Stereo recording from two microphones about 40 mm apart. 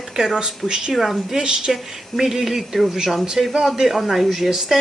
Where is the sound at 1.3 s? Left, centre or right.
Centre.